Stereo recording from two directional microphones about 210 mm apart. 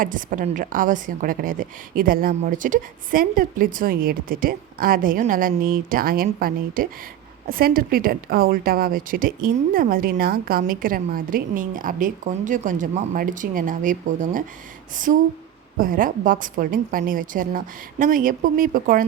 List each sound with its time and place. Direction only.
0.0 s a woman's voice: 40° right (ahead or behind)